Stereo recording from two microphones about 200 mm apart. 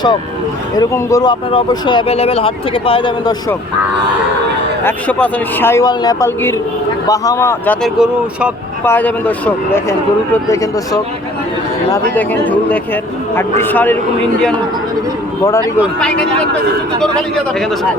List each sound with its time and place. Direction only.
0.8 s speech: 15° left (ahead or behind)
4.8 s a man's voice: 10° left (ahead or behind)
7.9 s speech: 5° right (ahead or behind)
8.8 s a man's voice: 10° left (ahead or behind)
10.3 s a man's voice: 15° left (ahead or behind)
12.1 s a man's voice: 10° left (ahead or behind)